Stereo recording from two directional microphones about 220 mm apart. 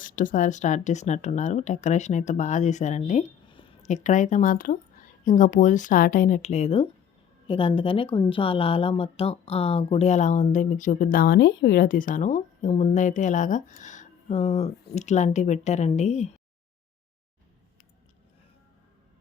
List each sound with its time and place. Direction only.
0.0 s speech: 35° left (ahead or behind)